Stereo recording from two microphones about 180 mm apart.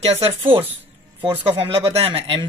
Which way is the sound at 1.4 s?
30° right (ahead or behind).